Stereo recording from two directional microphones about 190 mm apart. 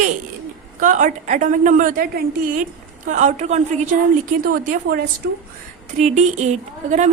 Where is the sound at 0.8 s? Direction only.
40° right (ahead or behind).